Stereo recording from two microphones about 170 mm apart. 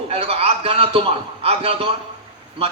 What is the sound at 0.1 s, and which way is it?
A man's voice, 35° right (ahead or behind).